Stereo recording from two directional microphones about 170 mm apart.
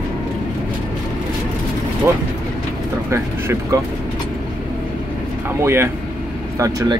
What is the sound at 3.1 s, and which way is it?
Speech, 15° right (ahead or behind).